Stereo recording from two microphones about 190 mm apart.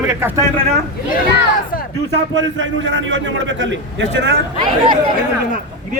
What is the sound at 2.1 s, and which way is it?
A man's voice, 75° right (ahead or behind).